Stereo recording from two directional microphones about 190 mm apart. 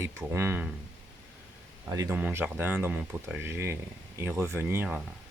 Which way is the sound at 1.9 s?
20° right (ahead or behind).